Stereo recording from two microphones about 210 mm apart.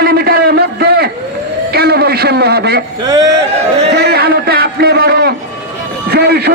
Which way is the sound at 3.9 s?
50° right (ahead or behind).